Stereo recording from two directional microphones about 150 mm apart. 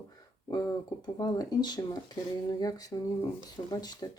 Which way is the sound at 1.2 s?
25° left (ahead or behind).